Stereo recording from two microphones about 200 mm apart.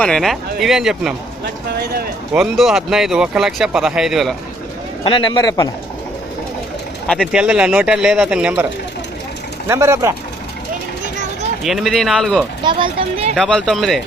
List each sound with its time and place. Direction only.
0.0 s speech: centre (ahead or behind)
1.7 s speech: 55° right (ahead or behind)
2.3 s speech: centre (ahead or behind)
5.0 s a man's voice: 25° left (ahead or behind)
7.1 s speech: centre (ahead or behind)
9.6 s speech: 15° right (ahead or behind)
11.6 s speech: centre (ahead or behind)
12.6 s a child's voice: 25° right (ahead or behind)
13.3 s speech: centre (ahead or behind)